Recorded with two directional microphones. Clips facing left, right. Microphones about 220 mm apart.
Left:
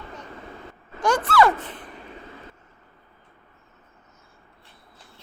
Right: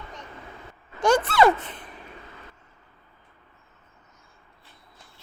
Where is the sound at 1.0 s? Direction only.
25° right (ahead or behind).